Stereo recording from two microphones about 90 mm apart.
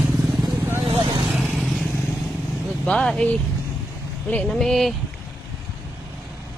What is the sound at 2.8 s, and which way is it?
Speech, 10° left (ahead or behind).